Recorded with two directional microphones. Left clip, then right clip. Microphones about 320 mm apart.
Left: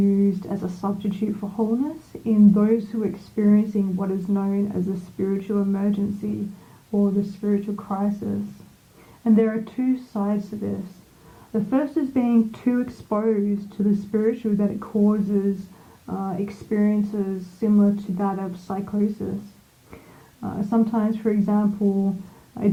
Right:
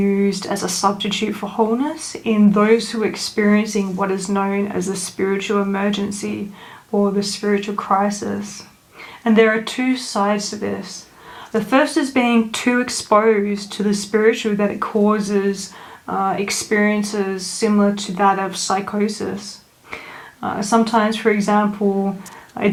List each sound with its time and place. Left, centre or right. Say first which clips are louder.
0.0 s speech: right 4 dB; centre
7.3 s speech: right 7 dB; centre
20.4 s speech: right 7 dB; centre